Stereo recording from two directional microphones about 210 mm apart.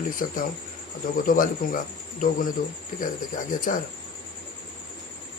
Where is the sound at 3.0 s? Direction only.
40° left (ahead or behind).